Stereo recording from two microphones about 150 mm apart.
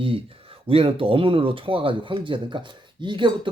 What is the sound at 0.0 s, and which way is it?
Speech, 35° right (ahead or behind).